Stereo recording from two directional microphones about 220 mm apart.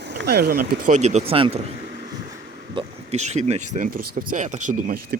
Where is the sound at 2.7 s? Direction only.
30° right (ahead or behind).